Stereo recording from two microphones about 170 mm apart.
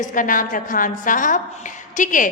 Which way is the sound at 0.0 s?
50° left (ahead or behind).